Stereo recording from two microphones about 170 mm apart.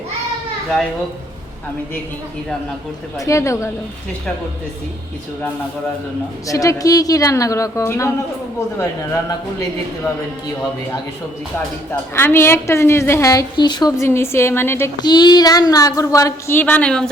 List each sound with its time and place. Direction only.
3.2 s a woman's voice: 15° left (ahead or behind)
6.5 s speech: 20° left (ahead or behind)
12.1 s a woman's voice: 15° left (ahead or behind)
15.0 s speech: 25° left (ahead or behind); by 17.1 s 5° left (ahead or behind)